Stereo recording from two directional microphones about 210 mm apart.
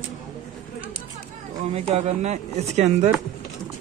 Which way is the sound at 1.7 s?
30° right (ahead or behind).